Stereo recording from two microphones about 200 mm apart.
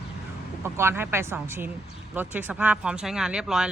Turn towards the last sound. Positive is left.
turn(degrees=-5)  # may be behind; listen again after turning